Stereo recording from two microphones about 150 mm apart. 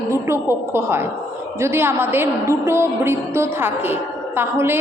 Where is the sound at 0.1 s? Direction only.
15° right (ahead or behind).